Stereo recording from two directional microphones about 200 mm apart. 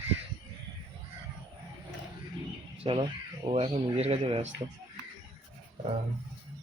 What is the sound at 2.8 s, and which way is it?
Speech, 25° right (ahead or behind).